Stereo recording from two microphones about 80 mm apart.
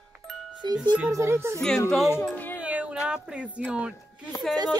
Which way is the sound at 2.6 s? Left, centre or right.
Centre.